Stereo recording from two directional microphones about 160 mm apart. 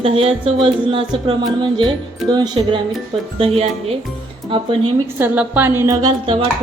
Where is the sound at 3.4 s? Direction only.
40° right (ahead or behind).